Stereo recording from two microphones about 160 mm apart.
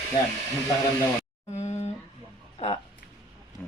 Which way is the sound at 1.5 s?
45° left (ahead or behind).